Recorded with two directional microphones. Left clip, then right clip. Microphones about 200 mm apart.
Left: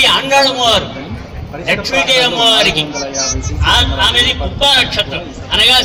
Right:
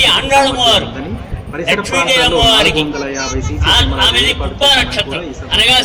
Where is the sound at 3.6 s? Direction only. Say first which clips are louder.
Even; 5° left (ahead or behind).